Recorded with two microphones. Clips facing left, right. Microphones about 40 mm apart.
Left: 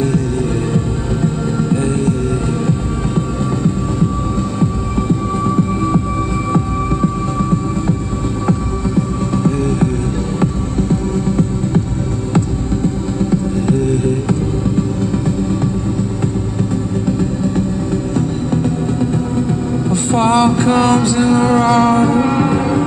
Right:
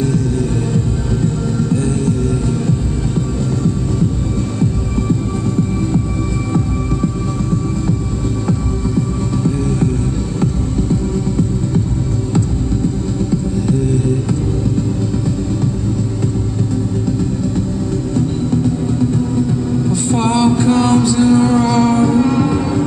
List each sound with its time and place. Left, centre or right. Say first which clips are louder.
0.7 s music: even; left
8.5 s music: left 1 dB; centre
13.3 s music: left 2 dB; left
18.1 s music: right 3 dB; left